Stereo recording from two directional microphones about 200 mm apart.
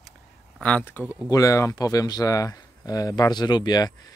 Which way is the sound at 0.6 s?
5° left (ahead or behind).